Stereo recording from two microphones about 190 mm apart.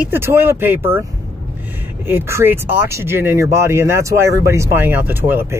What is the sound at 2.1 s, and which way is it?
Speech, 10° right (ahead or behind).